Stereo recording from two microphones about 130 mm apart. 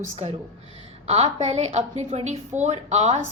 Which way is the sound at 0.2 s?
60° right (ahead or behind).